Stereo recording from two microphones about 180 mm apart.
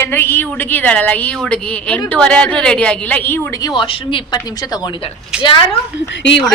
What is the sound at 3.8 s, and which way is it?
Speech, 30° left (ahead or behind).